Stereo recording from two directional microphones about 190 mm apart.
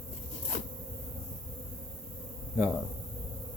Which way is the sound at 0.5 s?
40° left (ahead or behind).